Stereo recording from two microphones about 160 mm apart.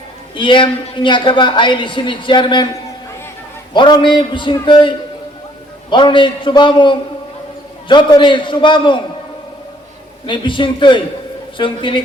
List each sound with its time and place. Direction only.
0.3 s a woman's voice: 30° left (ahead or behind)
3.8 s a woman's voice: 30° left (ahead or behind)
10.2 s a woman's voice: 30° left (ahead or behind)